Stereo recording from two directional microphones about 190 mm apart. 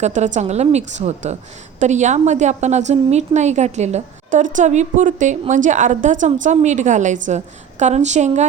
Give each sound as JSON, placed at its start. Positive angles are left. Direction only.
{"t": 0.0, "sound": "a woman's voice", "side_deg": -40}